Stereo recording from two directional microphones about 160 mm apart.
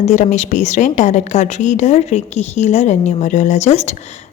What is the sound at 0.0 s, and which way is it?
A woman's voice, 45° left (ahead or behind).